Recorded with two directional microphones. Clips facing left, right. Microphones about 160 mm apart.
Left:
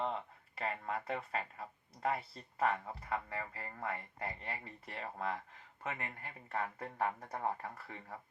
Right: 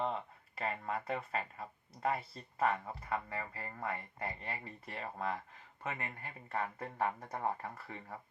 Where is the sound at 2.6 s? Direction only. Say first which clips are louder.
Right 1 dB; 25° right (ahead or behind).